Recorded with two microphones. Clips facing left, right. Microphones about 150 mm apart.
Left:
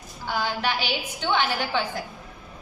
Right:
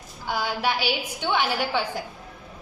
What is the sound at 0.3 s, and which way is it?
A woman's voice, 10° right (ahead or behind).